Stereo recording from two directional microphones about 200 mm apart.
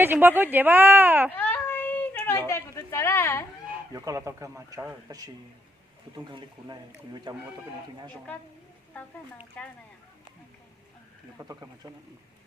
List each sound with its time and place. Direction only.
0.0 s speech: 10° right (ahead or behind)
1.3 s a sound: 10° left (ahead or behind)
3.9 s speech: 15° right (ahead or behind)
9.6 s speech: 5° left (ahead or behind)
11.3 s speech: 15° right (ahead or behind)